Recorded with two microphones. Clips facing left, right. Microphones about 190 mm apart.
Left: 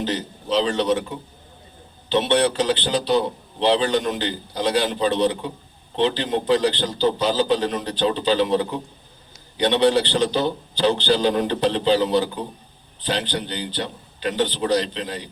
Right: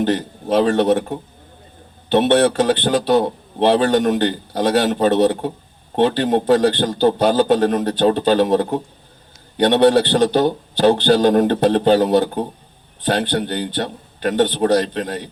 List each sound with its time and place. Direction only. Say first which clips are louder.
0.0 s a man's voice: right 7 dB; 55° right (ahead or behind)